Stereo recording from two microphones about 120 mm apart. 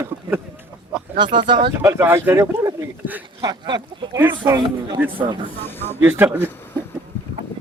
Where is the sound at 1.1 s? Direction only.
40° right (ahead or behind).